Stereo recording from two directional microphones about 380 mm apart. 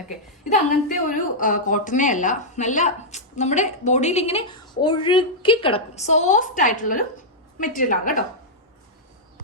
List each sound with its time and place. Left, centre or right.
0.9 s a woman's voice: left